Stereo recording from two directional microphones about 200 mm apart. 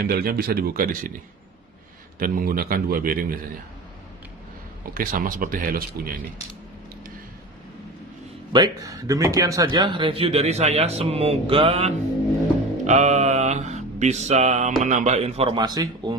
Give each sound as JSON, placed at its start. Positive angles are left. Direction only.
{"t": 0.1, "sound": "a man's voice", "side_deg": -50}
{"t": 2.1, "sound": "a man's voice", "side_deg": -45}
{"t": 4.9, "sound": "a man's voice", "side_deg": -45}
{"t": 8.5, "sound": "speech", "side_deg": -20}
{"t": 12.8, "sound": "a sound", "side_deg": -35}